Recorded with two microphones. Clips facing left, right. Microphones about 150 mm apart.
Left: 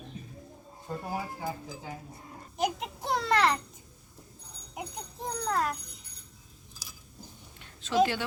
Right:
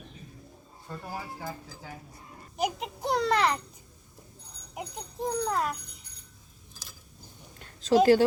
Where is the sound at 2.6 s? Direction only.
Centre (ahead or behind).